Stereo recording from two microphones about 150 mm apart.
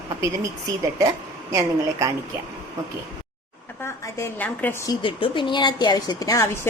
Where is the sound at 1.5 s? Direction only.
20° right (ahead or behind).